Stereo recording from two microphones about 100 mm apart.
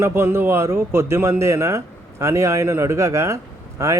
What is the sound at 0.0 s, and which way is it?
Speech, 25° right (ahead or behind).